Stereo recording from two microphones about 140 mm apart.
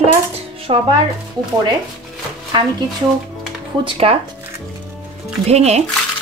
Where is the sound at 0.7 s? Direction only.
45° right (ahead or behind).